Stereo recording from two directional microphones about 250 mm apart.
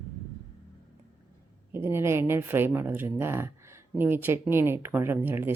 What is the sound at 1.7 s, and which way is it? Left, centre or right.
Speech, centre.